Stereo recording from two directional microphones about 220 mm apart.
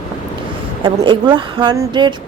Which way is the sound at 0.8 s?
20° right (ahead or behind).